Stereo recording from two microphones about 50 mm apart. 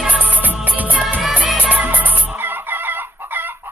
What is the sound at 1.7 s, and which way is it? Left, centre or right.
Chicken, right.